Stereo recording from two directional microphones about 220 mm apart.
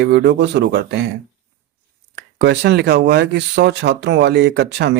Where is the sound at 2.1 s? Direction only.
50° right (ahead or behind).